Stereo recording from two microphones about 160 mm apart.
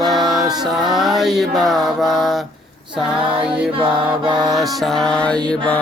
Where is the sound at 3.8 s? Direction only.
30° right (ahead or behind).